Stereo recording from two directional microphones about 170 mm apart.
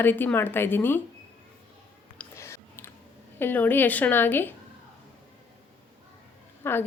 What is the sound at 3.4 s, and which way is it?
A woman's voice, 10° left (ahead or behind).